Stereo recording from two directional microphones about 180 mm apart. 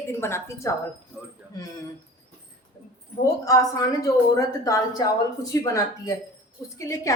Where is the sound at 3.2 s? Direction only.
20° left (ahead or behind).